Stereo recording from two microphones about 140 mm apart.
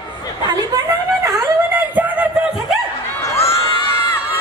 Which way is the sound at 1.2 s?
20° right (ahead or behind).